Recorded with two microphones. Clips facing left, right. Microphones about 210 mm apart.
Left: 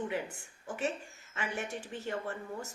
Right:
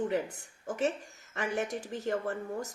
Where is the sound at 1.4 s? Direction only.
40° right (ahead or behind).